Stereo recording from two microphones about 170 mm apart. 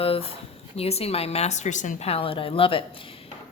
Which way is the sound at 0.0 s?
35° left (ahead or behind).